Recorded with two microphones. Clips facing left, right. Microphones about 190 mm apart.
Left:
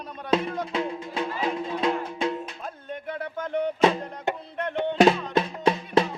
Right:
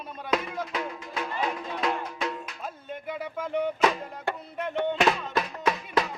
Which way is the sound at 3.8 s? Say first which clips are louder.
Left 4 dB; 30° left (ahead or behind).